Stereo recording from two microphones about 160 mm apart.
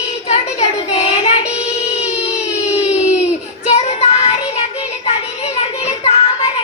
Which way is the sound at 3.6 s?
45° left (ahead or behind).